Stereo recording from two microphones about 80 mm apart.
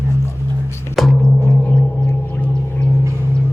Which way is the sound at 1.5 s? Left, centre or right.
Centre.